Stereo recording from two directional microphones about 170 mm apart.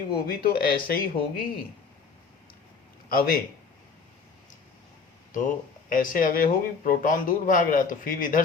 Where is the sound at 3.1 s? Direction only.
60° left (ahead or behind).